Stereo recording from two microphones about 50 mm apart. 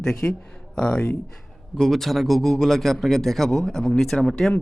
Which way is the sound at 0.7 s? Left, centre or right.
Left.